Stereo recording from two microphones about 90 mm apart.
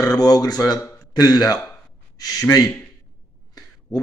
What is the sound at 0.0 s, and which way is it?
Speech, 45° left (ahead or behind).